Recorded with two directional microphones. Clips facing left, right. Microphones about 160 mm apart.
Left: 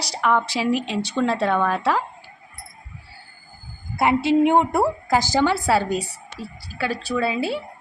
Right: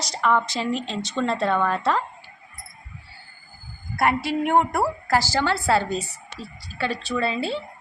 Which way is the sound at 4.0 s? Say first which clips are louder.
Left 5 dB; 20° left (ahead or behind).